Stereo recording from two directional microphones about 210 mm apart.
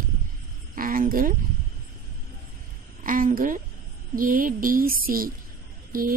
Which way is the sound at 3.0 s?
40° right (ahead or behind).